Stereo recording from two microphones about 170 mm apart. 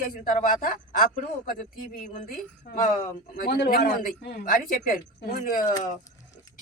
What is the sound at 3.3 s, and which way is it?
A man's voice, 65° left (ahead or behind).